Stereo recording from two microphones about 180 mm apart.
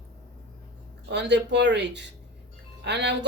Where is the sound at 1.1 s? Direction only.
75° right (ahead or behind).